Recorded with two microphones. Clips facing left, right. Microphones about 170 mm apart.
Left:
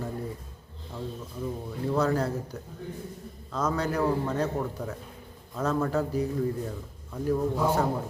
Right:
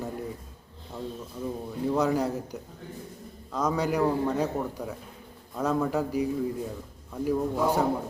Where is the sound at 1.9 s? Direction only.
15° right (ahead or behind).